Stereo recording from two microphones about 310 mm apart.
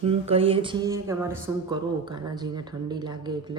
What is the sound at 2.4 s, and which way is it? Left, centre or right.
Speech, centre.